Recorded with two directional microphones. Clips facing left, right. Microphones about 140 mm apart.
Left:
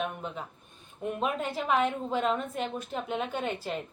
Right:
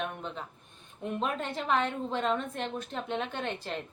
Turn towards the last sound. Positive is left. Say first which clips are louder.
# left 3 dB
turn(degrees=5)  # may be behind; listen again after turning